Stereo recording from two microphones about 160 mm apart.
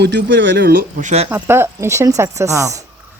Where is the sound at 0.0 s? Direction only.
90° right; by 1.1 s 65° right (ahead or behind).